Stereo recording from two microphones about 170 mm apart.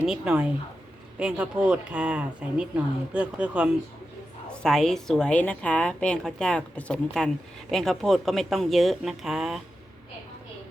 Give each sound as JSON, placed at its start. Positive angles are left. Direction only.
{"t": 0.0, "sound": "a woman's voice", "side_deg": -5}
{"t": 4.4, "sound": "a woman's voice", "side_deg": 5}